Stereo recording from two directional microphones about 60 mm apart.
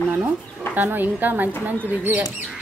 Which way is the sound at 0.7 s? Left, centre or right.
Right.